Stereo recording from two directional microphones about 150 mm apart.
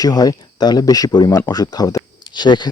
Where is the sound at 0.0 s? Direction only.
25° left (ahead or behind).